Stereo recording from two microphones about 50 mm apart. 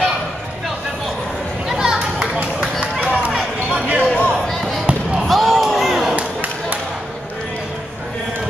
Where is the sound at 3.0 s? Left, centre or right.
Right.